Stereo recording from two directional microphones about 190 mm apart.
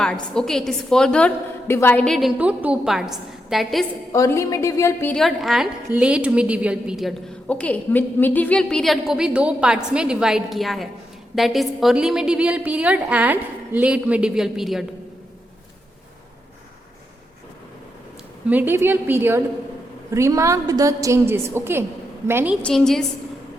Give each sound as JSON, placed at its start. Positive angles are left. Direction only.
{"t": 0.3, "sound": "a woman's voice", "side_deg": 0}
{"t": 4.1, "sound": "a woman's voice", "side_deg": 15}
{"t": 18.4, "sound": "a woman's voice", "side_deg": -10}
{"t": 22.6, "sound": "a woman's voice", "side_deg": 5}